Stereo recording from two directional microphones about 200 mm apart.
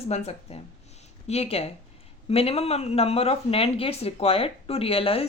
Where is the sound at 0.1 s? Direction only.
35° left (ahead or behind).